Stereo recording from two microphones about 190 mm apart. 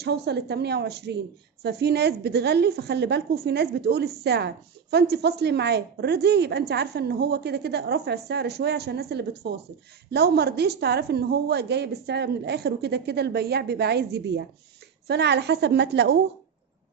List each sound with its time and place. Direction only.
0.0 s a woman's voice: 60° right (ahead or behind)